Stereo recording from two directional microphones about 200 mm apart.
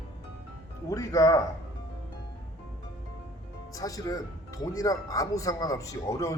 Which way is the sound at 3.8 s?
15° left (ahead or behind).